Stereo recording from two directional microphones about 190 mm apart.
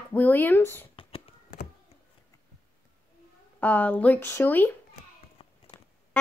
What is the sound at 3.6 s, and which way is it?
Speech, 10° left (ahead or behind).